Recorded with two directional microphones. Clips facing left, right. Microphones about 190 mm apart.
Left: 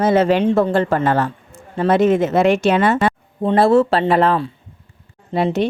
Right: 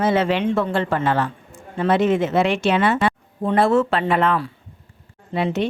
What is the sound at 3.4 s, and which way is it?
A woman's voice, 30° left (ahead or behind).